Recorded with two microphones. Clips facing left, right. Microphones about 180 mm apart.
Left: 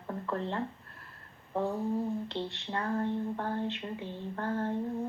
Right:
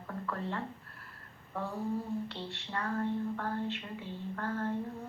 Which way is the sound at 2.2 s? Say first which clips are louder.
Left 5 dB; 25° left (ahead or behind).